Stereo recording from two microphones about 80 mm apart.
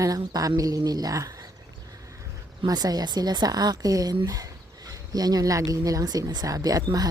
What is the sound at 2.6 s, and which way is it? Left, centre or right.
Speech, right.